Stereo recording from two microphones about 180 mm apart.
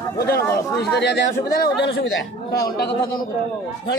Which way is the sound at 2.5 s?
60° left (ahead or behind).